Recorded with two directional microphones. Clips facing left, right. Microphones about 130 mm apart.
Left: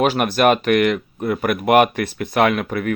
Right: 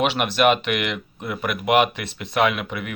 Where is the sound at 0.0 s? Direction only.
45° left (ahead or behind).